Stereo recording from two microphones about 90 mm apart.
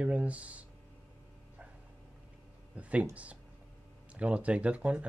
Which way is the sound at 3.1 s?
15° right (ahead or behind).